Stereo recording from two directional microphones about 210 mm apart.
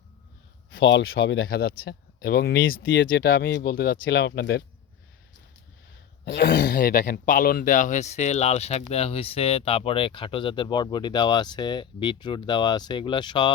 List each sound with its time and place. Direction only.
0.7 s speech: 60° left (ahead or behind)
1.4 s speech: 45° left (ahead or behind)
2.8 s speech: 60° left (ahead or behind)
6.2 s speech: 55° left (ahead or behind); by 13.5 s 20° left (ahead or behind)